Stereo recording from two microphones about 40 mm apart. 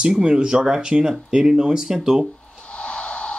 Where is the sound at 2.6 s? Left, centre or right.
Left.